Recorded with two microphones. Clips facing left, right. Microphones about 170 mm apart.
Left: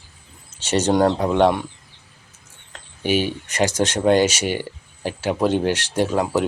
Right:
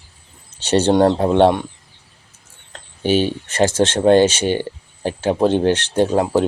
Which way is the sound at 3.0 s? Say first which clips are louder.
Right 4 dB; 30° right (ahead or behind).